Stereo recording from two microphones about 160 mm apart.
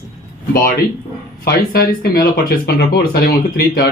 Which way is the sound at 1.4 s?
80° left.